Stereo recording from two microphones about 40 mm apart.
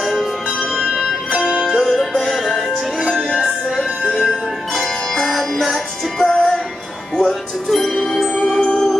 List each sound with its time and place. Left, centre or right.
0.0 s music: centre
0.7 s music: centre
1.7 s music: centre
3.1 s music: centre
4.2 s music: centre
8.5 s music: left